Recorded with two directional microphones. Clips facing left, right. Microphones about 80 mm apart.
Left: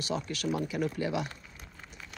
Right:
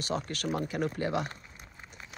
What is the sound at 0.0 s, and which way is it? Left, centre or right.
Speech, right.